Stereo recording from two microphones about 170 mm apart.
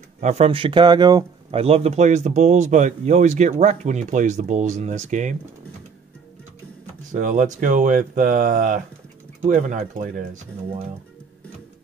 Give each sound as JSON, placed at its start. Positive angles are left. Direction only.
{"t": 0.2, "sound": "speech", "side_deg": -40}
{"t": 1.5, "sound": "speech", "side_deg": -35}
{"t": 7.1, "sound": "speech", "side_deg": -50}